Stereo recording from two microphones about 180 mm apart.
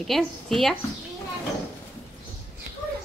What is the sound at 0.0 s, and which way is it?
Speech, centre (ahead or behind).